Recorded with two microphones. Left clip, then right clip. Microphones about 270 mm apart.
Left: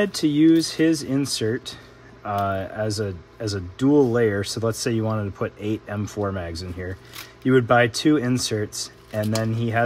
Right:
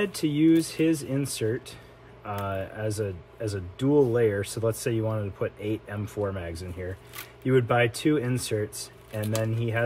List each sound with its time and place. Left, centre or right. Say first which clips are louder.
0.0 s speech: left 5 dB; left